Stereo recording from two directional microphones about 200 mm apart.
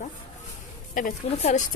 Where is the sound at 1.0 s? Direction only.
40° left (ahead or behind).